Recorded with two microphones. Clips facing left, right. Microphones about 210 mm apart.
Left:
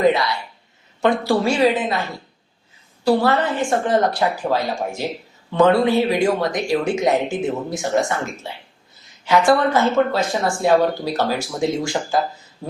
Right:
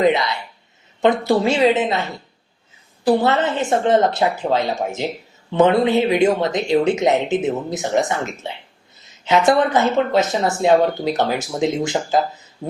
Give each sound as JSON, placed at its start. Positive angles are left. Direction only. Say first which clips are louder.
{"t": 0.0, "sound": "speech", "louder": "even", "side_deg": -20}
{"t": 3.0, "sound": "speech", "louder": "right 1 dB", "side_deg": -20}